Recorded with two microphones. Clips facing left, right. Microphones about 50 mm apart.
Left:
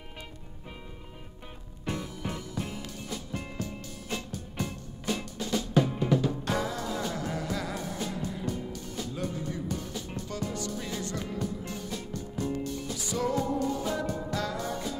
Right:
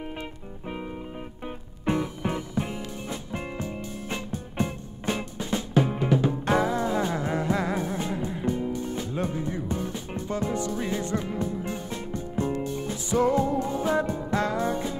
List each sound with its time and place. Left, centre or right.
0.2 s music: right